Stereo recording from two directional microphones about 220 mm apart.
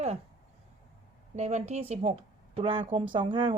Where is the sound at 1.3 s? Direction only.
30° right (ahead or behind).